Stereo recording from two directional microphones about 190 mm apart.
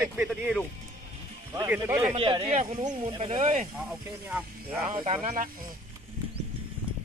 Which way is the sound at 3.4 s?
40° right (ahead or behind).